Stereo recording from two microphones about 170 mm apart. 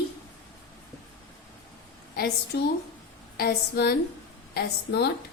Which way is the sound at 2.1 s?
65° left (ahead or behind).